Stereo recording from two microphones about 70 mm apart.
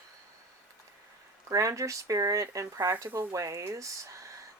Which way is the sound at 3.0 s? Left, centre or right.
Right.